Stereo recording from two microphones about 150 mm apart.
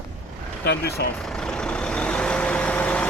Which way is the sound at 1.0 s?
90° left.